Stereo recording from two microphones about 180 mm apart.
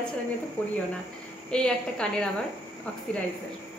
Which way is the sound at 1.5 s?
5° left (ahead or behind).